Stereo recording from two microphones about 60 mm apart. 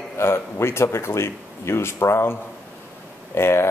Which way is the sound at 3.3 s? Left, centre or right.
Left.